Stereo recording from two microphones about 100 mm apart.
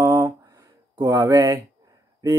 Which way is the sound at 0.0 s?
40° right (ahead or behind).